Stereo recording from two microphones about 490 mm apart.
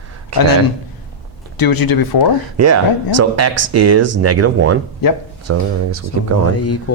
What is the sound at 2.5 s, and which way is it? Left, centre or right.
Speech, right.